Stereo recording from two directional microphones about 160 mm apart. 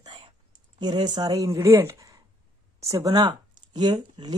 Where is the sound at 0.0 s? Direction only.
30° right (ahead or behind).